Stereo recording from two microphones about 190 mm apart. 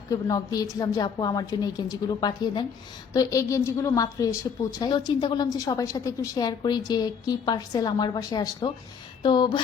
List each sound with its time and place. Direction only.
0.1 s a woman's voice: 20° left (ahead or behind)